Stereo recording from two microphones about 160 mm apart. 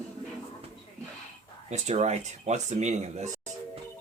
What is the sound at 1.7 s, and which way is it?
Speech, 45° right (ahead or behind).